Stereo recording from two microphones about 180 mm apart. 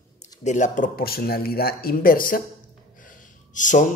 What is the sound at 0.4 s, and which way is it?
Speech, 40° left (ahead or behind).